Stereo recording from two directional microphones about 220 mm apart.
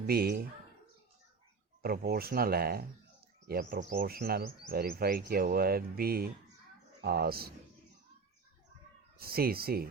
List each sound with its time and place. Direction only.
0.1 s speech: 45° right (ahead or behind)
1.8 s speech: 45° right (ahead or behind)
9.1 s speech: 45° right (ahead or behind)